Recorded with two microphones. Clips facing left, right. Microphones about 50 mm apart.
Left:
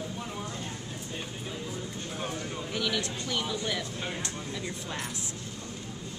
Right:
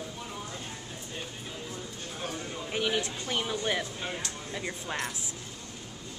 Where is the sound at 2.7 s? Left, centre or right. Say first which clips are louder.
Right 2 dB; right.